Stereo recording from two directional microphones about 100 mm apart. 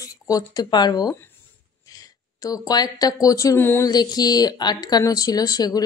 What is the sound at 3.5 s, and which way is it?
Speech, 20° left (ahead or behind).